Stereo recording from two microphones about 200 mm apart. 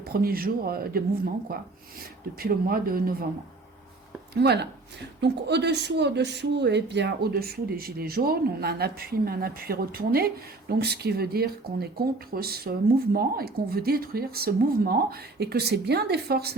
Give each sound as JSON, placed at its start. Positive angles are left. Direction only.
{"t": 0.0, "sound": "a woman's voice", "side_deg": -50}
{"t": 4.4, "sound": "a woman's voice", "side_deg": -55}